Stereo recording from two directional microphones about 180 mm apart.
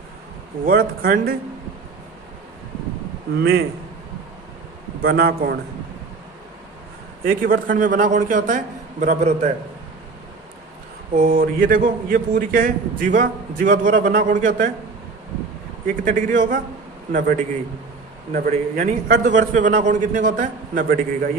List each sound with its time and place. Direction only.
0.6 s a man's voice: 55° right (ahead or behind)
3.3 s a man's voice: 65° right (ahead or behind)
5.0 s a man's voice: 55° right (ahead or behind)
7.3 s a man's voice: 50° right (ahead or behind)
11.1 s a man's voice: 50° right (ahead or behind)
15.9 s a man's voice: 45° right (ahead or behind)
18.3 s a man's voice: 50° right (ahead or behind)